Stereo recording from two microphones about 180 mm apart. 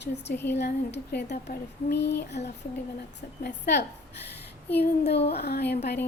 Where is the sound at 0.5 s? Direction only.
70° left (ahead or behind).